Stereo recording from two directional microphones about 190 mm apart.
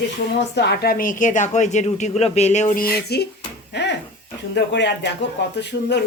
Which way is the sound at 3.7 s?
65° left (ahead or behind).